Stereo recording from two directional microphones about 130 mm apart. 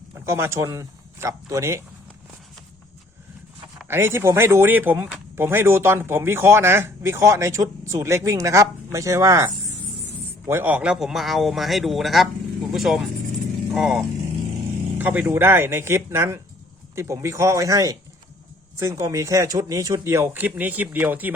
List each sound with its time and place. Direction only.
0.3 s speech: 20° right (ahead or behind)
3.8 s speech: 20° right (ahead or behind)